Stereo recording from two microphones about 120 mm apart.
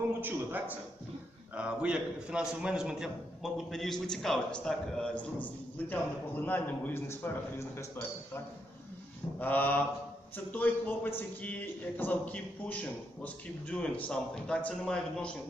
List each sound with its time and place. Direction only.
0.2 s a man's voice: 15° right (ahead or behind); by 7.9 s 20° left (ahead or behind)
9.4 s a man's voice: 15° left (ahead or behind)